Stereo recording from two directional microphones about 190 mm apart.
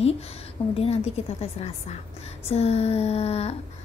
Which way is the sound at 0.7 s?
30° left (ahead or behind).